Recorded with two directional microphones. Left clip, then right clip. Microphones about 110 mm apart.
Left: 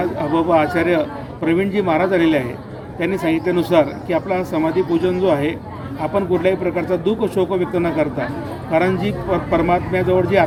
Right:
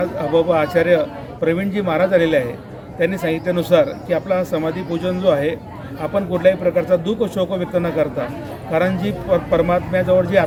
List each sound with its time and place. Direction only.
0.0 s a man's voice: 20° right (ahead or behind)